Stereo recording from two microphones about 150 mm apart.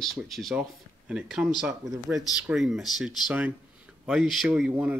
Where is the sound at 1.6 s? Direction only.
20° right (ahead or behind).